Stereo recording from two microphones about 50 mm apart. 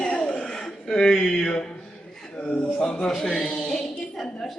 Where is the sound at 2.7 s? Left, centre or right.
Centre.